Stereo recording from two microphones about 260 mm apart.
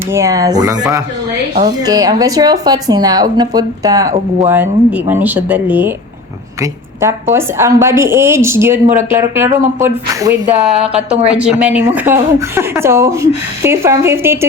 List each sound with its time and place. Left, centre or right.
0.1 s speech: centre
7.3 s speech: centre